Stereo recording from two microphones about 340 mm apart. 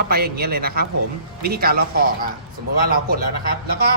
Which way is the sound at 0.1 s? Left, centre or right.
Right.